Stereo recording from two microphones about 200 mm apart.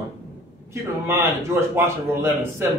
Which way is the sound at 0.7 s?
15° right (ahead or behind).